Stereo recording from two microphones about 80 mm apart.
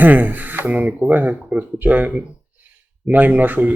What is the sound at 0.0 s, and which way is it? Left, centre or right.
Speech, right.